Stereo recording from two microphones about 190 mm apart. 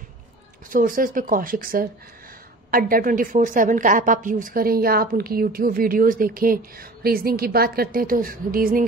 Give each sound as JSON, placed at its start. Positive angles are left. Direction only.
{"t": 0.7, "sound": "speech", "side_deg": -45}